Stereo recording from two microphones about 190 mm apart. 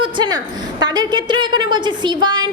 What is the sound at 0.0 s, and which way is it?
A woman's voice, 20° right (ahead or behind).